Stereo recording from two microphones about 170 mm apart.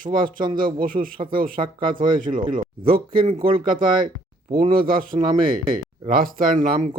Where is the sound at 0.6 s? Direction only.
55° right (ahead or behind).